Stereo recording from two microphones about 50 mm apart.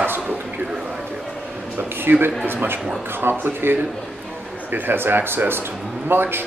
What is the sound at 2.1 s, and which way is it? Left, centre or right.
A man's voice, right.